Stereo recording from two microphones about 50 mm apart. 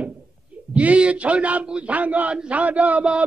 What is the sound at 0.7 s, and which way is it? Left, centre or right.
A man's voice, right.